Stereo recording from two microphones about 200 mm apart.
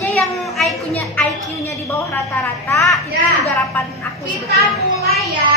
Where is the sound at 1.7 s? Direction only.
15° left (ahead or behind).